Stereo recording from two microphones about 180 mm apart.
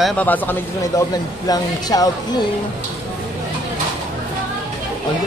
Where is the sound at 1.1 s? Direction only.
20° left (ahead or behind).